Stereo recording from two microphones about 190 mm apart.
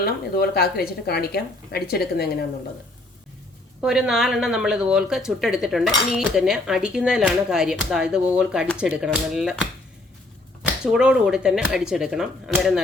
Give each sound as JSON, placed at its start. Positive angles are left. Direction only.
{"t": 0.0, "sound": "a woman's voice", "side_deg": 55}
{"t": 3.8, "sound": "speech", "side_deg": -5}
{"t": 10.9, "sound": "speech", "side_deg": -5}